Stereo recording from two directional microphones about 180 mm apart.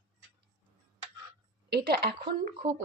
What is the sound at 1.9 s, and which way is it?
Speech, 60° right (ahead or behind).